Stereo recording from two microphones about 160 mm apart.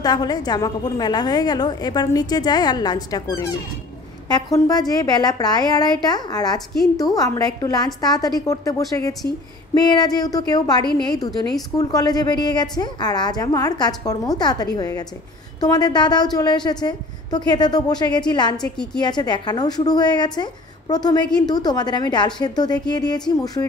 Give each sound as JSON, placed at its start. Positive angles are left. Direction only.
{"t": 0.0, "sound": "a woman's voice", "side_deg": 25}